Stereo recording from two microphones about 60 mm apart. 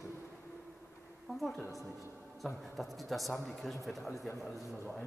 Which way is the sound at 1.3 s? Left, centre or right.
Centre.